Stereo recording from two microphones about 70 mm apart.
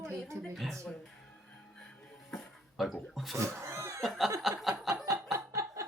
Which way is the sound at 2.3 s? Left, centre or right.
Centre.